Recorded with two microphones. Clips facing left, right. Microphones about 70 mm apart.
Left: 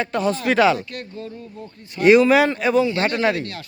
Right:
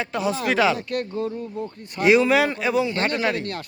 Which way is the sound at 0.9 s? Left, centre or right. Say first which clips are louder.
Right 7 dB; right.